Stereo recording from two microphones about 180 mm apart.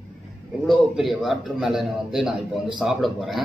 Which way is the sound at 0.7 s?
Centre (ahead or behind).